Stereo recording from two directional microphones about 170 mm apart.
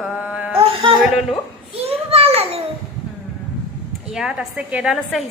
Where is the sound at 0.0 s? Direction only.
5° right (ahead or behind).